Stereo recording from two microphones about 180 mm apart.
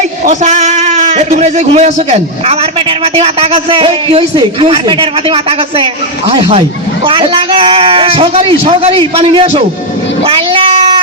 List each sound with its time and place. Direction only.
0.3 s a man's voice: 40° right (ahead or behind)
10.2 s cat: 30° right (ahead or behind)